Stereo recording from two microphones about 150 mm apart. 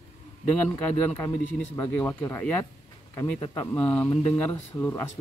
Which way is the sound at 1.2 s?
20° left (ahead or behind).